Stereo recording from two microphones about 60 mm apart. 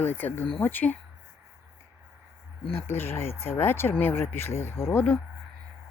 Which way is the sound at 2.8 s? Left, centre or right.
Left.